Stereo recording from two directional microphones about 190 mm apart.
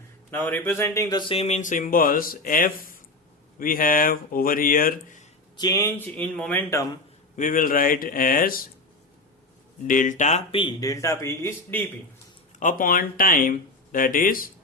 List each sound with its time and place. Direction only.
0.3 s speech: 10° left (ahead or behind); by 5.2 s 45° left (ahead or behind)
5.5 s speech: 20° left (ahead or behind)
7.3 s speech: 45° left (ahead or behind)
9.8 s speech: 45° left (ahead or behind); by 11.8 s 15° left (ahead or behind)
12.5 s speech: 45° left (ahead or behind)